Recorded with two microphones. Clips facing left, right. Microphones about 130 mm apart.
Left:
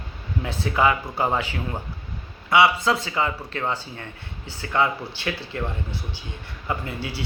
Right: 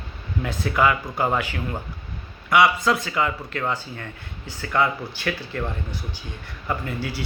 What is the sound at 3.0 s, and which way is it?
Speech, 25° left (ahead or behind).